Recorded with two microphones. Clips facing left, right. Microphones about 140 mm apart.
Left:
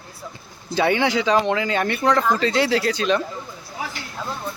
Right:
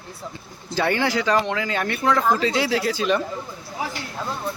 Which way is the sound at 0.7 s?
15° left (ahead or behind).